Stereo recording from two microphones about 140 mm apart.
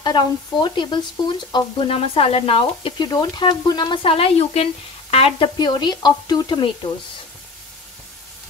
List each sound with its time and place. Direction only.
0.0 s speech: 30° left (ahead or behind)
3.0 s speech: 30° left (ahead or behind)
5.6 s speech: 30° left (ahead or behind)